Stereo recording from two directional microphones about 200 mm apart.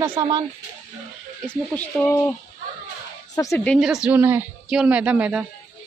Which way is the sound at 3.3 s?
15° left (ahead or behind).